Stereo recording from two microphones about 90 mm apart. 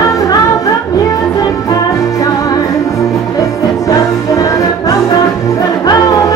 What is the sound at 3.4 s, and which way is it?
Music, 40° left (ahead or behind).